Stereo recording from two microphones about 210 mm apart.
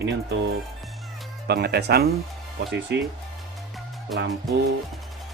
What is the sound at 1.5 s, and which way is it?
Speech, 50° right (ahead or behind).